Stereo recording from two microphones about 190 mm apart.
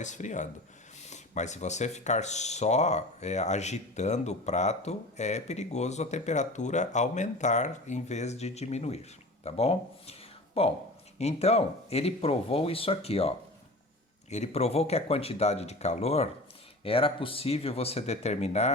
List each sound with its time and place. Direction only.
0.0 s speech: 40° left (ahead or behind)